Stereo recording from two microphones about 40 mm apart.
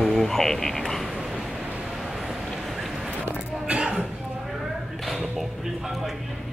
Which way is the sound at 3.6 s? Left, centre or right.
Right.